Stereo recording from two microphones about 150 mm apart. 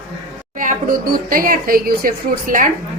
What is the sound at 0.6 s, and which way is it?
Speech, 65° right (ahead or behind).